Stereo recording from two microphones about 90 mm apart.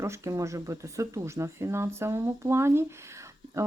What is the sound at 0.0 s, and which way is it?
A woman's voice, 35° right (ahead or behind).